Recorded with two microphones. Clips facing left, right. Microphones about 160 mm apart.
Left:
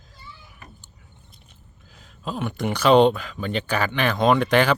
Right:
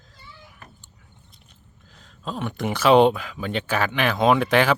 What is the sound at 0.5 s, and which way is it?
Speech, centre (ahead or behind).